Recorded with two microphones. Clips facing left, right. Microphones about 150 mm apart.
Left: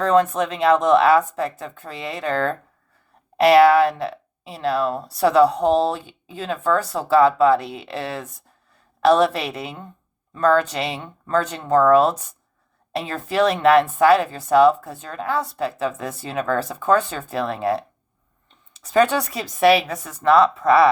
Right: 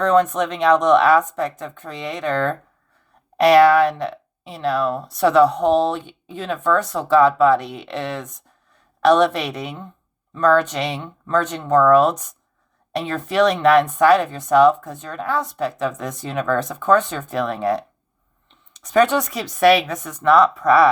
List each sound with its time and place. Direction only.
0.0 s speech: 30° left (ahead or behind)